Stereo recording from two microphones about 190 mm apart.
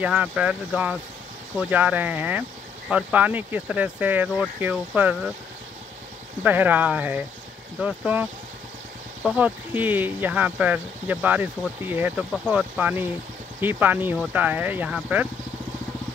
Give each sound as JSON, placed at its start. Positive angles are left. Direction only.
{"t": 0.0, "sound": "speech", "side_deg": -5}
{"t": 6.4, "sound": "speech", "side_deg": -10}